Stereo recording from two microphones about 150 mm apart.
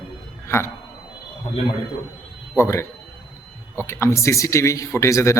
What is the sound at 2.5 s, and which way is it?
Speech, 20° left (ahead or behind).